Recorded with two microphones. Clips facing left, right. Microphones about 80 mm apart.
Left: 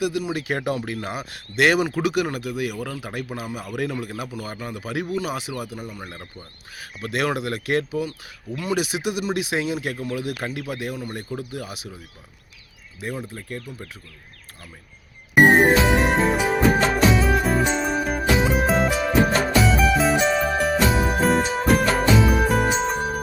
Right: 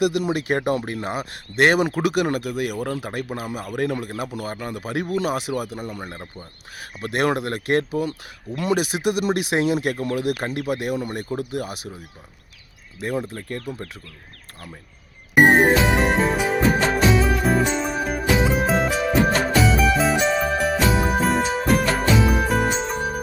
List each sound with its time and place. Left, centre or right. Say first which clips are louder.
0.0 s speech: right 4 dB; right
0.3 s speech: right 3 dB; right
6.0 s speech: right 3 dB; right
6.7 s speech: right 2 dB; right
13.0 s speech: right 5 dB; right
15.4 s music: left 1 dB; centre